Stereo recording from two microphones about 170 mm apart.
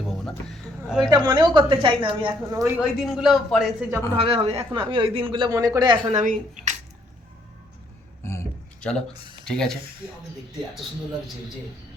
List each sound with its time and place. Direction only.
0.0 s a sound: centre (ahead or behind)
1.1 s speech: 25° right (ahead or behind)
2.7 s speech: centre (ahead or behind)
4.2 s speech: 35° right (ahead or behind)
6.1 s speech: 45° right (ahead or behind)
8.2 s a sound: 15° left (ahead or behind)
8.9 s speech: 5° left (ahead or behind)